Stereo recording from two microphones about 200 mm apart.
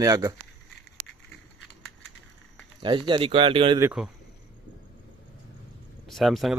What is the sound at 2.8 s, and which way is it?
Speech, 25° right (ahead or behind).